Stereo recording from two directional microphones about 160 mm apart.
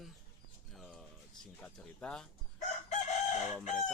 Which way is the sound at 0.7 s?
Centre (ahead or behind).